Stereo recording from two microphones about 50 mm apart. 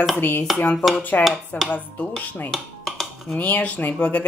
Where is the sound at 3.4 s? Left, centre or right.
Left.